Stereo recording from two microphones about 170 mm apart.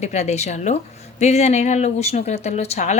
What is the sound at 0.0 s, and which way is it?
Speech, 40° left (ahead or behind).